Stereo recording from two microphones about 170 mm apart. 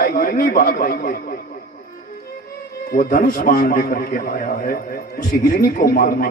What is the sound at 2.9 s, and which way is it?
A man's voice, 55° left (ahead or behind).